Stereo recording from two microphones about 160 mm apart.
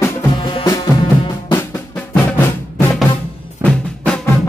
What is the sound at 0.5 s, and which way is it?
Music, 30° left (ahead or behind).